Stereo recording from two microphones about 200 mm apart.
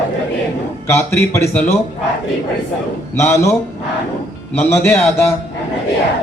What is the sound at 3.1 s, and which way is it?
Speech, 15° left (ahead or behind).